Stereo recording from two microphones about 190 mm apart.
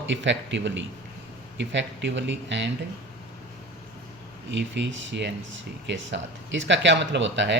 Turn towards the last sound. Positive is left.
turn(degrees=-70)  # may be behind; listen again after turning